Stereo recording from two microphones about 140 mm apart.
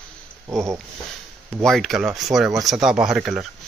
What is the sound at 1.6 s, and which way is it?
Speech, centre (ahead or behind).